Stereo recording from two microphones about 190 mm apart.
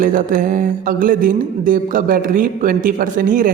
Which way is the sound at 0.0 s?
45° right (ahead or behind).